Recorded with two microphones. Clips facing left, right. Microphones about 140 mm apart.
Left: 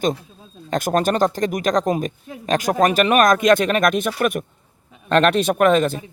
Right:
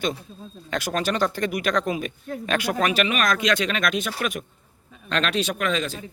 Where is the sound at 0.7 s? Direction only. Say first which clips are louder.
Left 6 dB; 45° left (ahead or behind).